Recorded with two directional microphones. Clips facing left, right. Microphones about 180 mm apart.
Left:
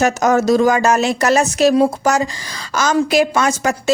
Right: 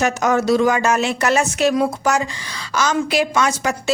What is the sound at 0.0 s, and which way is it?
A woman's voice, 40° left (ahead or behind).